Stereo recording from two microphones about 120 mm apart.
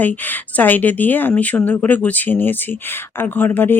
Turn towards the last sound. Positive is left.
turn(degrees=15)  # may be behind; listen again after turning